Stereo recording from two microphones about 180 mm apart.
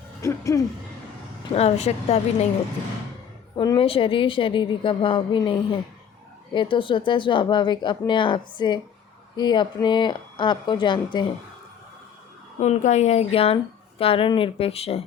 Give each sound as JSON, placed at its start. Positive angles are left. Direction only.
{"t": 0.2, "sound": "a sound", "side_deg": 15}
{"t": 1.5, "sound": "speech", "side_deg": 35}
{"t": 3.5, "sound": "speech", "side_deg": 25}
{"t": 12.5, "sound": "speech", "side_deg": 40}